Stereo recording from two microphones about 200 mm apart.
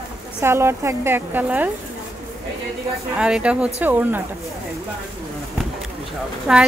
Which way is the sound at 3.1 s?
5° right (ahead or behind).